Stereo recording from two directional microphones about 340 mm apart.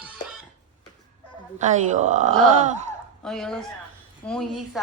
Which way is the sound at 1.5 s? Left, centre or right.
Right.